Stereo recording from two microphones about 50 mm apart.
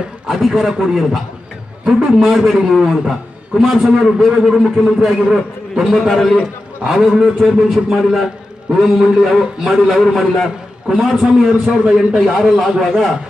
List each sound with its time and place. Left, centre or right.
0.3 s a man's voice: centre
2.2 s a man's voice: centre
4.6 s a man's voice: centre
5.9 s a man's voice: centre
6.3 s a man's voice: centre
11.6 s a man's voice: centre
12.5 s a man's voice: centre